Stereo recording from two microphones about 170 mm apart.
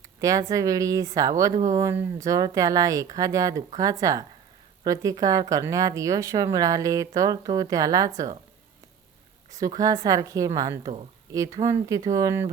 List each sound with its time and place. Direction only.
0.2 s speech: 20° right (ahead or behind)
9.6 s speech: 20° right (ahead or behind)